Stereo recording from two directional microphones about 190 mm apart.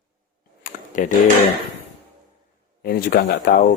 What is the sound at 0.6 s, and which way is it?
Computer keyboard, 45° left (ahead or behind).